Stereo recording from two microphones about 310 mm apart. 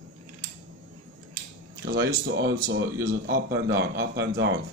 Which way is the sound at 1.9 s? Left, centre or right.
Right.